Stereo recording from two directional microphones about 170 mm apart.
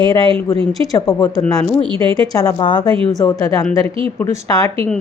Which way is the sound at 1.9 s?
30° right (ahead or behind).